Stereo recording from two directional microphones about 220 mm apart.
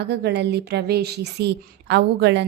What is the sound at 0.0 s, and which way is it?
A woman's voice, 50° right (ahead or behind).